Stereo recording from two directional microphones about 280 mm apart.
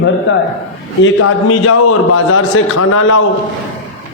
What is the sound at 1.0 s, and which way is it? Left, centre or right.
Mantra, left.